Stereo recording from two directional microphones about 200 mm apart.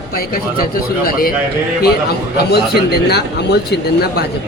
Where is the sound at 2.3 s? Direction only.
55° left (ahead or behind).